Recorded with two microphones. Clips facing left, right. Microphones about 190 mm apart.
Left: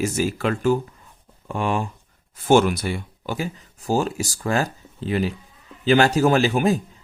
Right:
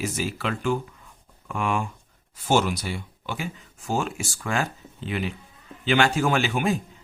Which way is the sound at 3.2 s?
40° left (ahead or behind).